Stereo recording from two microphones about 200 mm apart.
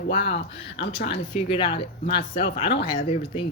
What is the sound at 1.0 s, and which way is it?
Speech, 25° left (ahead or behind).